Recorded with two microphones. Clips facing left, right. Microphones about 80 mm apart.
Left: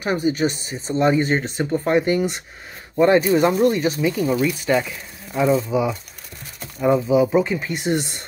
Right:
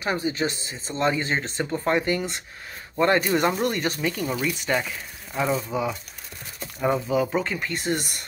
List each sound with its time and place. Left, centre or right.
0.0 s speech: centre
7.1 s speech: centre